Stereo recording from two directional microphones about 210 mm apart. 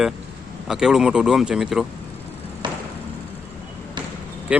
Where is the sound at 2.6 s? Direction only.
20° right (ahead or behind).